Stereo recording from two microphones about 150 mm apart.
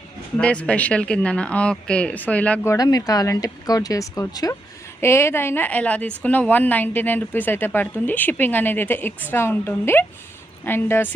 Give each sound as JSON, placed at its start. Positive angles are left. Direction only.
{"t": 0.3, "sound": "a woman's voice", "side_deg": 10}
{"t": 2.7, "sound": "a woman's voice", "side_deg": 25}